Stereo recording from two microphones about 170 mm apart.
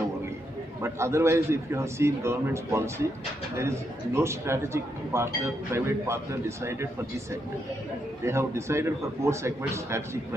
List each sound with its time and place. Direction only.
0.8 s a man's voice: 15° right (ahead or behind)
8.3 s a man's voice: 15° right (ahead or behind)